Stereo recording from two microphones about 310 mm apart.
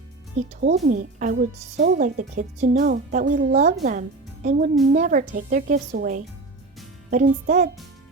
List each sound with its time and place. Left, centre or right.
0.6 s a woman's voice: right